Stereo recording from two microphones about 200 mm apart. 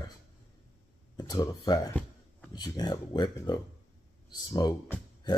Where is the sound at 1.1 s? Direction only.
20° left (ahead or behind).